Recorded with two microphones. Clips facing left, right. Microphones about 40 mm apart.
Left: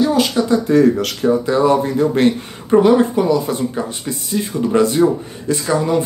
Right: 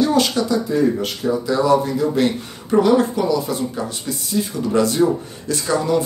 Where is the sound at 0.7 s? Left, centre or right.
Left.